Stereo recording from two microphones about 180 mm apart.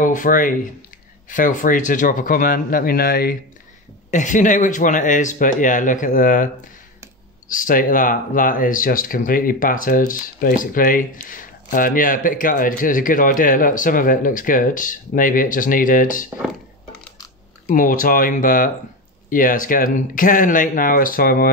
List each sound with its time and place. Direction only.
0.0 s speech: 45° left (ahead or behind)
4.1 s speech: 45° left (ahead or behind)
16.3 s a sound: centre (ahead or behind)
17.6 s speech: 50° left (ahead or behind)